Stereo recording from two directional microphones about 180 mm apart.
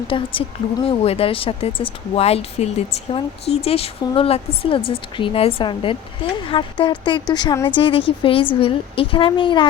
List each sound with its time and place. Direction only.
0.1 s a woman's voice: 30° left (ahead or behind)